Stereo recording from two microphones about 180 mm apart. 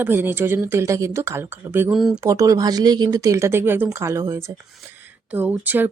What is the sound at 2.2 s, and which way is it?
Speech, 20° right (ahead or behind).